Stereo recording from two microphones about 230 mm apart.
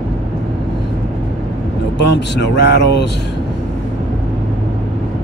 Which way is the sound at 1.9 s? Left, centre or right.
Left.